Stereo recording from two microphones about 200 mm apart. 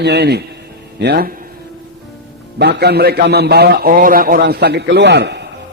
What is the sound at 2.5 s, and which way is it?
A man's voice, 55° right (ahead or behind).